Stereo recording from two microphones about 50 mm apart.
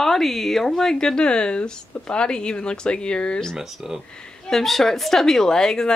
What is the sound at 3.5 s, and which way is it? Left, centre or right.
Speech, centre.